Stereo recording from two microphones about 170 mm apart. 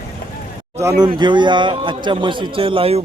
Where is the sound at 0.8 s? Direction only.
20° right (ahead or behind).